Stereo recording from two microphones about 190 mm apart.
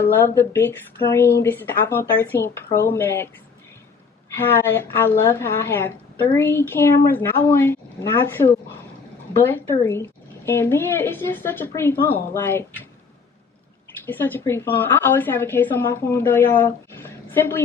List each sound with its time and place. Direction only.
0.0 s a woman's voice: 10° left (ahead or behind)
4.4 s a woman's voice: 10° left (ahead or behind)
14.0 s a woman's voice: 10° left (ahead or behind)